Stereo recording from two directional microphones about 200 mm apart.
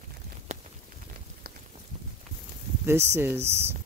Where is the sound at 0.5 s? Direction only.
35° right (ahead or behind).